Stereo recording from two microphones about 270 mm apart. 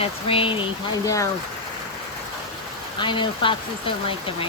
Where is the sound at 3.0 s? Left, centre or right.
Centre.